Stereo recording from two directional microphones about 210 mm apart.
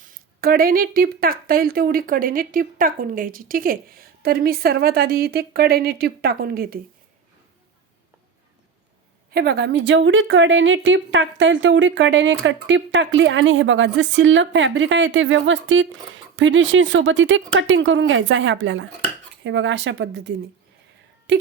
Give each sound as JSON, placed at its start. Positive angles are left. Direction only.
{"t": 0.0, "sound": "speech", "side_deg": -40}
{"t": 9.3, "sound": "a woman's voice", "side_deg": -50}